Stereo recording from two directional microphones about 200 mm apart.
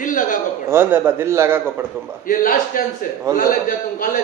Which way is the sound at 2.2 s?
40° left (ahead or behind).